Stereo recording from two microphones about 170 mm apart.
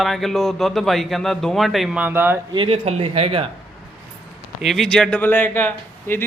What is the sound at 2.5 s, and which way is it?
Speech, 35° right (ahead or behind).